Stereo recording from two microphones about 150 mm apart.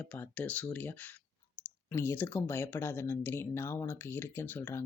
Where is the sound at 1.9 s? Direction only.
15° left (ahead or behind).